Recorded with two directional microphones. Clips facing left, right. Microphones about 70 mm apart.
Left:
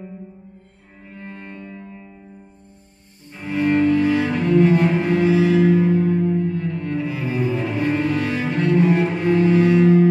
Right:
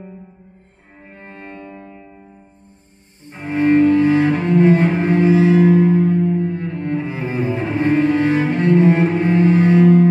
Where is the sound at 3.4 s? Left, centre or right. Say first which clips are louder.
Right 4 dB; right.